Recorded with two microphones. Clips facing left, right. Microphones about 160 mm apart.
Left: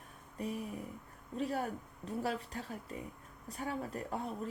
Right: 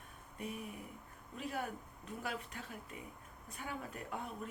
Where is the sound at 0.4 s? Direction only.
35° left (ahead or behind).